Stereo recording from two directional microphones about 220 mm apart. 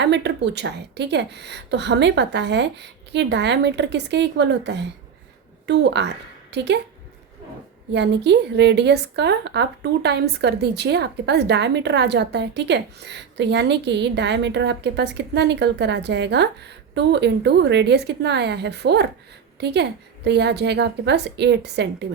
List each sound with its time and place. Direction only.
0.0 s speech: 50° right (ahead or behind)
7.9 s speech: 50° right (ahead or behind)